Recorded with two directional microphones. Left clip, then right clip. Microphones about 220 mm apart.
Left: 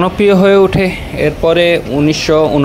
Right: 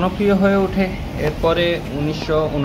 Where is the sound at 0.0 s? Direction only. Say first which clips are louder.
Left 8 dB; 40° left (ahead or behind).